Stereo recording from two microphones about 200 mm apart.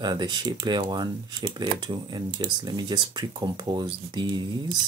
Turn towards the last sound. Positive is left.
turn(degrees=-20)  # may be behind; listen again after turning